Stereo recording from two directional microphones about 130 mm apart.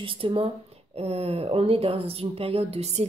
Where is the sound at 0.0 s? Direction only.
40° right (ahead or behind).